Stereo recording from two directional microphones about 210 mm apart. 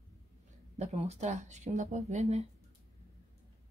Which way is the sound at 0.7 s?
30° right (ahead or behind).